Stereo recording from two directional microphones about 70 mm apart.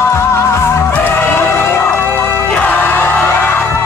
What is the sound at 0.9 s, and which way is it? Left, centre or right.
Music, left.